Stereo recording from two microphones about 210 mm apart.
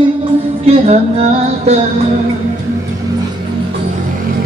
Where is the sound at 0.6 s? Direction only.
30° right (ahead or behind).